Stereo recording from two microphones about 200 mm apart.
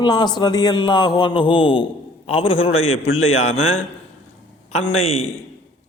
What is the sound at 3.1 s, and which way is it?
Speech, 90° left.